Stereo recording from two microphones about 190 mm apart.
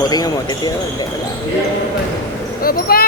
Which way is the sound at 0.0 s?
20° left (ahead or behind).